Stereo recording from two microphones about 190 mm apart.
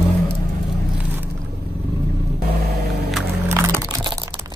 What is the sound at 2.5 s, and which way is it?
Vehicle, 55° right (ahead or behind).